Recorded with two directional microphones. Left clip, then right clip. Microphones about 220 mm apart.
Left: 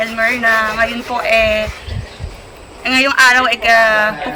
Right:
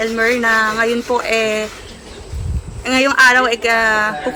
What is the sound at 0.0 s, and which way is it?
Speech, 20° right (ahead or behind).